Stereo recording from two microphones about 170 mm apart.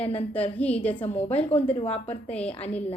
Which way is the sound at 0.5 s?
10° left (ahead or behind).